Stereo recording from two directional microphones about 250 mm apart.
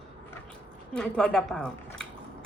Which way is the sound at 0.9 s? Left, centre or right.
Centre.